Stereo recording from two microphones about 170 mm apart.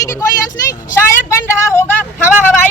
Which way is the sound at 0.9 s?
15° left (ahead or behind).